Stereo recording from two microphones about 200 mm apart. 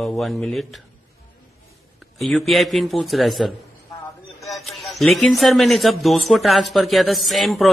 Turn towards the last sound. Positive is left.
turn(degrees=0)  # may be behind; listen again after turning